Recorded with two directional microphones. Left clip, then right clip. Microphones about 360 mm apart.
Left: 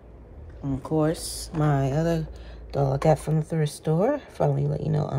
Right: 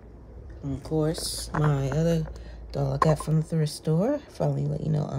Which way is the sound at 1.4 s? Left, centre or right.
Left.